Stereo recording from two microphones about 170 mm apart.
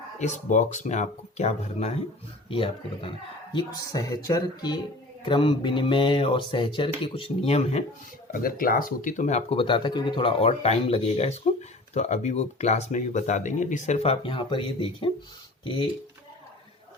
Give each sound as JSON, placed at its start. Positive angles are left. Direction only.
{"t": 0.2, "sound": "speech", "side_deg": 45}
{"t": 8.3, "sound": "speech", "side_deg": 55}